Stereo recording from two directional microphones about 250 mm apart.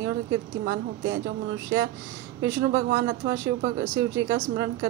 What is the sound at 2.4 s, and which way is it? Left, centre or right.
A woman's voice, right.